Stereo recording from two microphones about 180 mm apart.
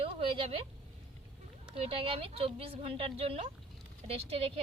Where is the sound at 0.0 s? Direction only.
30° right (ahead or behind).